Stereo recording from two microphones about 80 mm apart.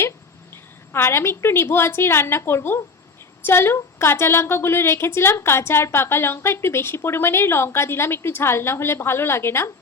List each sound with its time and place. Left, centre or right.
0.5 s a woman's voice: left